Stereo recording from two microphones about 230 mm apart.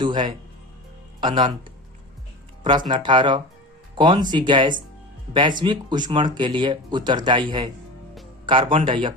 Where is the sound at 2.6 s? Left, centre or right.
Centre.